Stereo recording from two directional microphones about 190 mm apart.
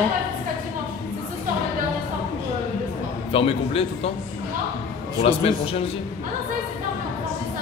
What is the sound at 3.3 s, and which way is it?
Speech, 30° left (ahead or behind).